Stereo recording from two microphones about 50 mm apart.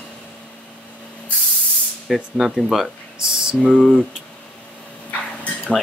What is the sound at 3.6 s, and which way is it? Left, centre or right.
Speech, centre.